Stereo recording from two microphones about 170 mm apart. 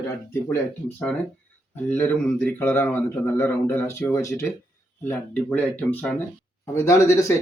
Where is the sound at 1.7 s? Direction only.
10° left (ahead or behind).